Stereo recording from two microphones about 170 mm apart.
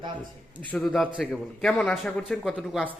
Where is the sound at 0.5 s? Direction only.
5° left (ahead or behind).